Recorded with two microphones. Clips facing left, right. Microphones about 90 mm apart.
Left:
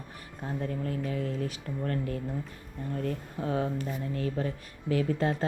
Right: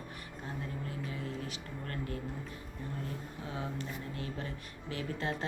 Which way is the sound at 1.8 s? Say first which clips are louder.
Left 8 dB; 40° left (ahead or behind).